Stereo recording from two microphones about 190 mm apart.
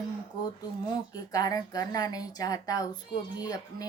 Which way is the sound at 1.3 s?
20° left (ahead or behind).